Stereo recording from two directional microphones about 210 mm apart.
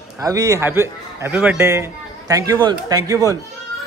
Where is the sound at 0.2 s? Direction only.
15° right (ahead or behind).